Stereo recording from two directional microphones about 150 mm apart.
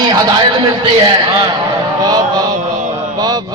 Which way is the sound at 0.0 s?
25° right (ahead or behind).